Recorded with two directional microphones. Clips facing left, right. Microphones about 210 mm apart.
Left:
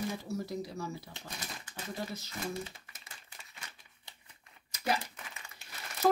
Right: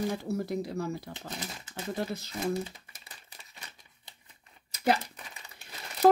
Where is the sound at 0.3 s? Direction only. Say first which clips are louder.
Right 5 dB; 60° right (ahead or behind).